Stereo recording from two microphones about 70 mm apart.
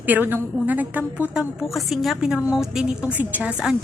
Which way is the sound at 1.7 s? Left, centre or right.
Centre.